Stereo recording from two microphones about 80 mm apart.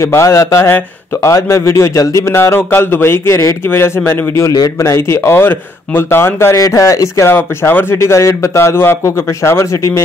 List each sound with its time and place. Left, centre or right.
0.0 s speech: left
4.5 s speech: left
4.7 s speech: left
6.5 s speech: left
7.3 s speech: left